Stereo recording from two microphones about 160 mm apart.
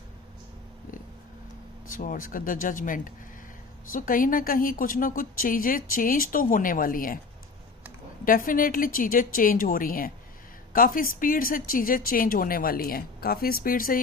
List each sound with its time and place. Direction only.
1.9 s speech: 60° left (ahead or behind)
8.2 s speech: 60° left (ahead or behind)